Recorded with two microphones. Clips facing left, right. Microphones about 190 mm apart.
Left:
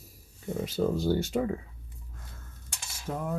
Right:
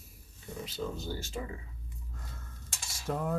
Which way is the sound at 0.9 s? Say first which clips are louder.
Left 11 dB; 70° left (ahead or behind).